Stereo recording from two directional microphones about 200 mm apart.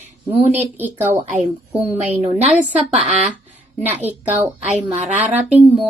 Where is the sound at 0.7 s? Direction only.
10° right (ahead or behind).